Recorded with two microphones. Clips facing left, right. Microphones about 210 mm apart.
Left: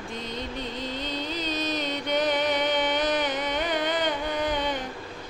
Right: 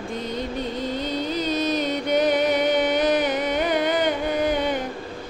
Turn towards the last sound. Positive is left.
turn(degrees=-10)  # may be behind; listen again after turning